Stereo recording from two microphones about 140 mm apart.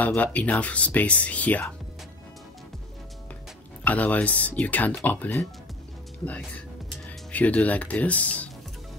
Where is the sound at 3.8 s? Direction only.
10° left (ahead or behind).